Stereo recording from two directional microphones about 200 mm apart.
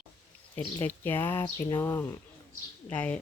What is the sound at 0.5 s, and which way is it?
Speech, 10° left (ahead or behind).